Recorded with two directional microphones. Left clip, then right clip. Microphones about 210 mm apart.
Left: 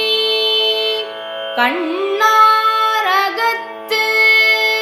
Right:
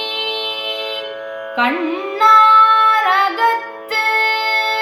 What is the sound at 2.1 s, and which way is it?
Music, 40° left (ahead or behind).